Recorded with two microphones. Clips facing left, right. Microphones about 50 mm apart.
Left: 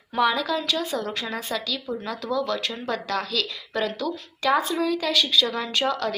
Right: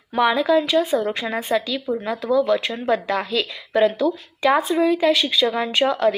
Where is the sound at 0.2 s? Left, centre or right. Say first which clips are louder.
Right 5 dB; right.